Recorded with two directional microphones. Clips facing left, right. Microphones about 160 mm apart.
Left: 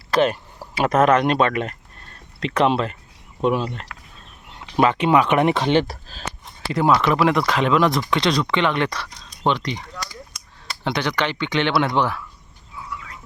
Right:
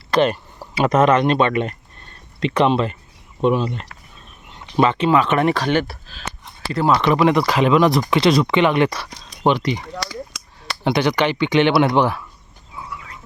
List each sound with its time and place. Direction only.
0.1 s speech: 5° left (ahead or behind); by 5.8 s 20° left (ahead or behind)
5.9 s speech: 40° left (ahead or behind)
6.7 s speech: 15° left (ahead or behind)
6.9 s speech: centre (ahead or behind)
10.0 s cap gun: 90° right
10.8 s speech: 10° right (ahead or behind)